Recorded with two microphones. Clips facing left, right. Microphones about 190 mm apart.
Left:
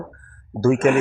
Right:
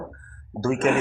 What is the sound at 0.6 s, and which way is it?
Speech, 10° left (ahead or behind).